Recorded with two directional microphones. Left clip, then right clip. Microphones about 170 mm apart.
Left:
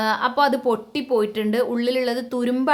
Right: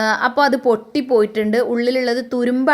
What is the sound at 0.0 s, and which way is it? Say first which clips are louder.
Speech: right 4 dB; 25° right (ahead or behind).